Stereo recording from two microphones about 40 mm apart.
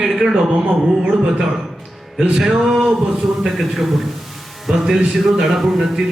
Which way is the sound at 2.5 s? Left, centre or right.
Right.